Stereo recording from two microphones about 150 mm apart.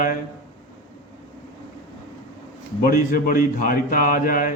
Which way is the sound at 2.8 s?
75° left (ahead or behind).